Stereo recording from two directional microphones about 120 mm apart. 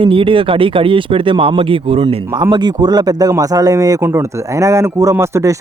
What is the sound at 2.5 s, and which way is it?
Speech, 35° right (ahead or behind).